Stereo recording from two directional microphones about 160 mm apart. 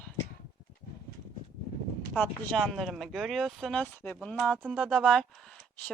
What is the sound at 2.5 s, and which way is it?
Speech, centre (ahead or behind).